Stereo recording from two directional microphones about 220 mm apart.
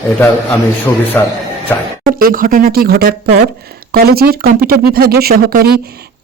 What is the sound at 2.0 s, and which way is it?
Speech, 40° right (ahead or behind).